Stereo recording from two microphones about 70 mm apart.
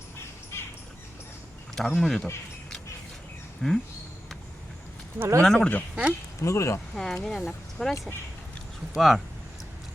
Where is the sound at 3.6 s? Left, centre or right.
Centre.